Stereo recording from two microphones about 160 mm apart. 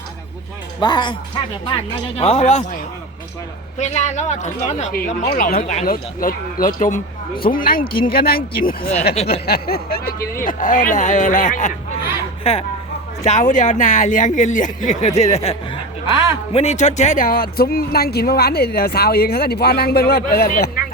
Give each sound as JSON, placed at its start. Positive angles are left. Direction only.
{"t": 0.8, "sound": "speech", "side_deg": 30}
{"t": 2.1, "sound": "speech", "side_deg": 40}
{"t": 3.8, "sound": "speech", "side_deg": 45}
{"t": 5.5, "sound": "speech", "side_deg": 60}
{"t": 12.4, "sound": "speech", "side_deg": 35}
{"t": 13.2, "sound": "speech", "side_deg": 50}